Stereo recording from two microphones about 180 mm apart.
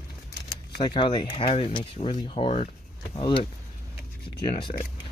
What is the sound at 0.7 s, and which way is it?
Speech, 25° left (ahead or behind).